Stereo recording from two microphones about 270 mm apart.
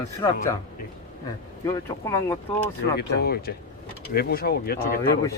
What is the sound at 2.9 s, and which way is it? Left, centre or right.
Speech, left.